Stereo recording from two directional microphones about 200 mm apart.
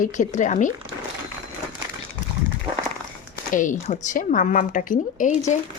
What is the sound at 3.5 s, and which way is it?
A woman's voice, 40° left (ahead or behind).